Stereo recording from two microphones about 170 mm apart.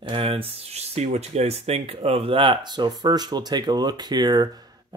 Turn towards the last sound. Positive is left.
turn(degrees=-25)  # may be behind; listen again after turning